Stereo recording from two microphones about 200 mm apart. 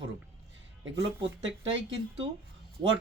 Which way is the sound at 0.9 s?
70° right (ahead or behind).